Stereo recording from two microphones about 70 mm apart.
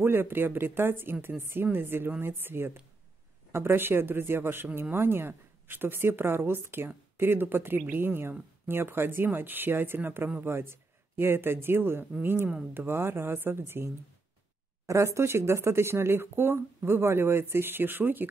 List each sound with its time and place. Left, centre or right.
0.0 s speech: right
14.9 s speech: right